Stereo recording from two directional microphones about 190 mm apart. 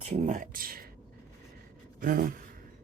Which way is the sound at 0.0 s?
35° right (ahead or behind).